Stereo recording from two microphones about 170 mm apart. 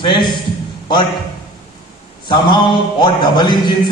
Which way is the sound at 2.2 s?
25° left (ahead or behind).